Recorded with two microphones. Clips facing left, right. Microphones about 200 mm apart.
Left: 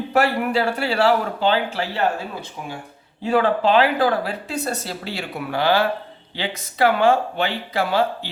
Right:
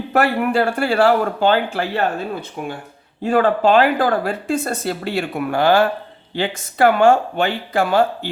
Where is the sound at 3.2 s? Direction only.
50° right (ahead or behind).